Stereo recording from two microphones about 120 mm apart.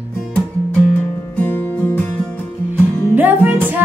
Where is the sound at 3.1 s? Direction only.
15° right (ahead or behind).